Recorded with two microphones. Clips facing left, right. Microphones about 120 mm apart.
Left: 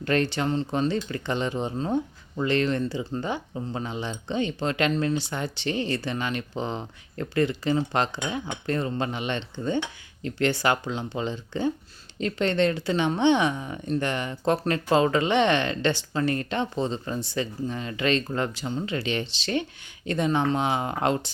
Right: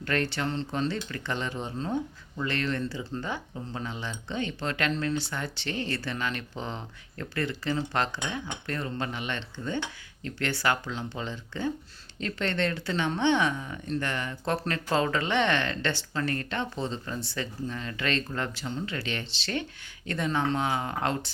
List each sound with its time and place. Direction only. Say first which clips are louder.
0.0 s speech: left 5 dB; 20° left (ahead or behind)